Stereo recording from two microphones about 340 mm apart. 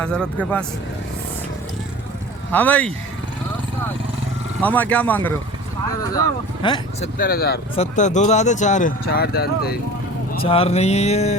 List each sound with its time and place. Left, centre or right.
0.0 s speech: centre
2.5 s speech: centre
4.6 s speech: centre
7.2 s speech: left
10.4 s speech: centre